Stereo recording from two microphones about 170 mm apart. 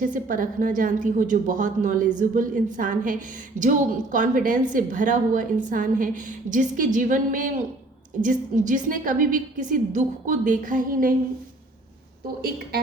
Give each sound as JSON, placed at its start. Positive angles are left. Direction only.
{"t": 0.0, "sound": "a woman's voice", "side_deg": -50}
{"t": 12.4, "sound": "a woman's voice", "side_deg": -65}